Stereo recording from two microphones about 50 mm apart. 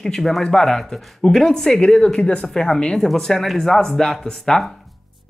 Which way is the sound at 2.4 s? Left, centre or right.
Centre.